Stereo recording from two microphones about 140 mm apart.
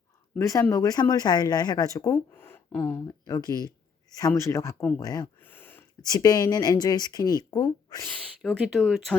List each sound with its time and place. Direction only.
0.3 s speech: 20° left (ahead or behind)
3.2 s speech: 25° left (ahead or behind)
5.4 s a sound: 15° left (ahead or behind)
6.0 s speech: 25° left (ahead or behind)
8.4 s speech: centre (ahead or behind)